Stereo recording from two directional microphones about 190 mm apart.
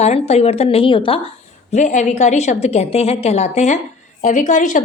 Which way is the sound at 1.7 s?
40° left (ahead or behind).